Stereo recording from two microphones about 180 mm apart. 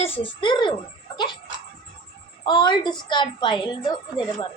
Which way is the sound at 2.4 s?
25° left (ahead or behind).